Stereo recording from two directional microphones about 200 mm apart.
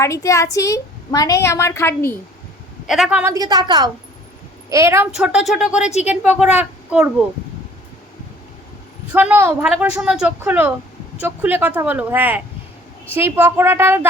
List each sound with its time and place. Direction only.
0.0 s speech: 15° left (ahead or behind)
2.8 s speech: centre (ahead or behind)
3.3 s a woman's voice: 20° right (ahead or behind)
5.1 s speech: 5° right (ahead or behind)
5.9 s a woman's voice: 35° left (ahead or behind)
6.2 s speech: 5° right (ahead or behind)
9.1 s a woman's voice: 10° right (ahead or behind)